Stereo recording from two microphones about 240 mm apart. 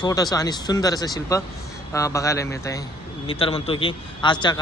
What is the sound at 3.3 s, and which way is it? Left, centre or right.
Speech, left.